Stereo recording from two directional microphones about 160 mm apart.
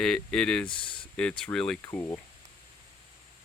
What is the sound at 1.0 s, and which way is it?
Speech, 5° left (ahead or behind).